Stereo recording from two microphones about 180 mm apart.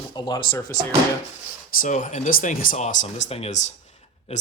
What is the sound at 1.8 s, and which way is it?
Speech, 45° left (ahead or behind).